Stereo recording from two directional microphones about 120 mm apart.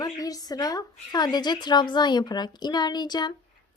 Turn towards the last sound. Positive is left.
turn(degrees=35)  # may be behind; listen again after turning